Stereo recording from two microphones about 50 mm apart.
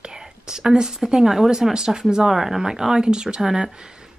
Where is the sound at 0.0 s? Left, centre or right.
Centre.